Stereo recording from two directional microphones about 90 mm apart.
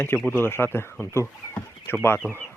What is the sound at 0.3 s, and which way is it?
Speech, 25° left (ahead or behind).